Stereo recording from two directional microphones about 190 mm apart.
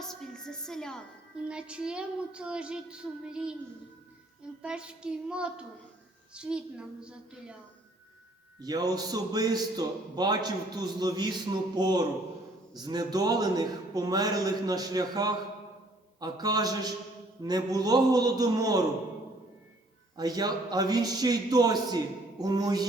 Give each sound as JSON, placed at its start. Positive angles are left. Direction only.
{"t": 0.0, "sound": "music", "side_deg": 0}
{"t": 1.5, "sound": "a woman's voice", "side_deg": -5}
{"t": 4.6, "sound": "a woman's voice", "side_deg": -5}
{"t": 8.6, "sound": "a man's voice", "side_deg": -20}
{"t": 20.1, "sound": "a man's voice", "side_deg": -20}